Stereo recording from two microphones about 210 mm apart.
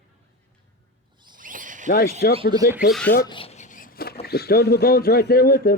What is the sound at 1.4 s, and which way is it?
Zipper, 40° right (ahead or behind).